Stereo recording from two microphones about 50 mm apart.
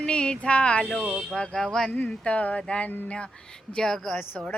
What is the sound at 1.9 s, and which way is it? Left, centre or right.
Speech, left.